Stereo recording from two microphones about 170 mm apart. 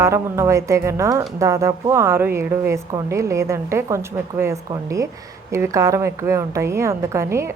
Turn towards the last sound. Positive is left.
turn(degrees=-15)  # may be behind; listen again after turning